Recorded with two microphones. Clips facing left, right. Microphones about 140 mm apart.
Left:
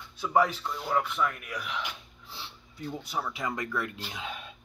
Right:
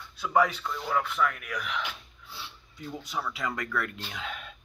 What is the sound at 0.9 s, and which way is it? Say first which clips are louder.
Speech: even; 20° left (ahead or behind).